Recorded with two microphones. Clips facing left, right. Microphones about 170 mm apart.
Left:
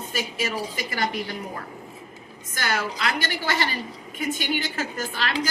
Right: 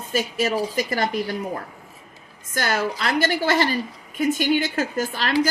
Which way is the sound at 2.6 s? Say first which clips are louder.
Right 4 dB; 45° right (ahead or behind).